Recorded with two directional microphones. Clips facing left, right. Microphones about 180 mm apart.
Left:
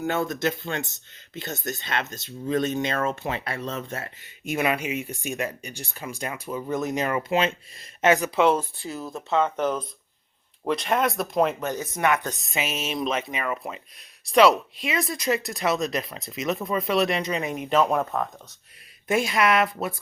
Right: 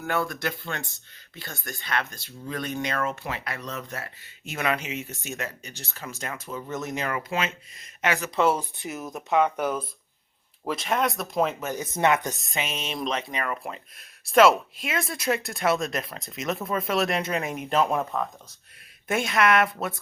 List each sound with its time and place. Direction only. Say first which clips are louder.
0.0 s speech: left 3 dB; 20° left (ahead or behind)
4.4 s speech: left 3 dB; 15° left (ahead or behind)
8.5 s speech: left 3 dB; 20° right (ahead or behind); by 11.8 s 5° right (ahead or behind)
11.8 s speech: right 3 dB; 25° right (ahead or behind)
12.4 s speech: left 2 dB; 5° left (ahead or behind)